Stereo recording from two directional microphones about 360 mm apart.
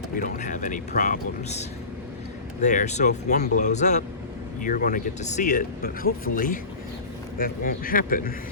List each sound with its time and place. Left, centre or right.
0.2 s speech: left